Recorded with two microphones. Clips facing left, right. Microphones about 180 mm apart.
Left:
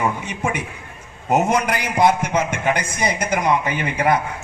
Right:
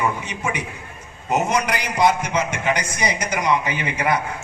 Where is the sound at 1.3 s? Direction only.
50° left (ahead or behind).